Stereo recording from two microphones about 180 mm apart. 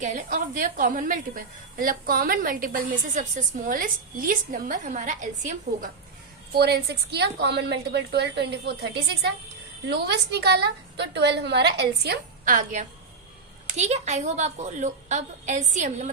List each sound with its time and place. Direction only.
0.0 s a woman's voice: 45° right (ahead or behind)
6.6 s a woman's voice: 65° right (ahead or behind)
13.7 s a woman's voice: 40° right (ahead or behind)